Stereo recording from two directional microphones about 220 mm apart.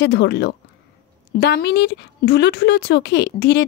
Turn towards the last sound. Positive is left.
turn(degrees=50)  # may be behind; listen again after turning